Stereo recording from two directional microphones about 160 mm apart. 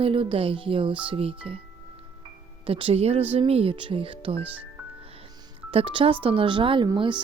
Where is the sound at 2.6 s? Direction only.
35° right (ahead or behind).